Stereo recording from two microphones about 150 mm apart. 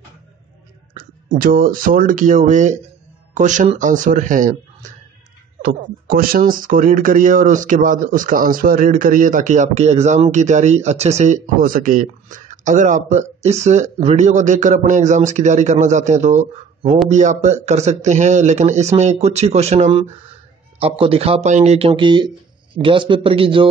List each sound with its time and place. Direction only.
0.9 s speech: 70° right (ahead or behind)
5.6 s speech: 75° right (ahead or behind); by 23.7 s 35° right (ahead or behind)